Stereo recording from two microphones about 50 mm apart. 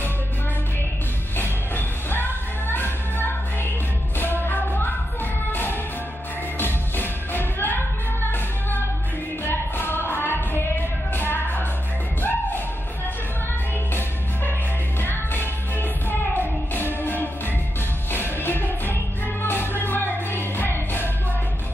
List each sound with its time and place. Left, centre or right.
1.4 s music: left
15.0 s music: left